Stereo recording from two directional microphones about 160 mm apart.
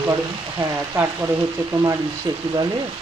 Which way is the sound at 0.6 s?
15° right (ahead or behind).